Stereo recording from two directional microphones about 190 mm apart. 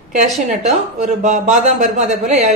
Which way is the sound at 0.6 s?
40° right (ahead or behind).